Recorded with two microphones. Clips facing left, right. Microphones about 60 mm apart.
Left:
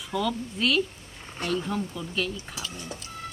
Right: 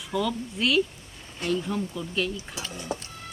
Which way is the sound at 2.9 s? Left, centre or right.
Right.